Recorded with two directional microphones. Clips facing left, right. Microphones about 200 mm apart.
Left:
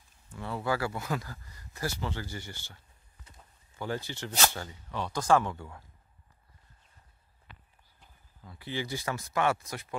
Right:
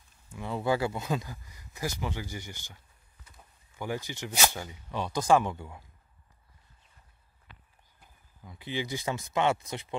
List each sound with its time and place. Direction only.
0.3 s speech: 15° right (ahead or behind)
8.0 s speech: 15° right (ahead or behind)